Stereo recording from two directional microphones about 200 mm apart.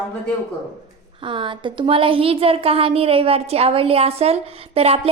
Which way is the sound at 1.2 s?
25° right (ahead or behind).